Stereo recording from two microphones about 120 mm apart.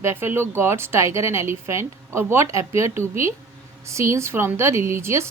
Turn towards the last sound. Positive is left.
turn(degrees=-20)  # may be behind; listen again after turning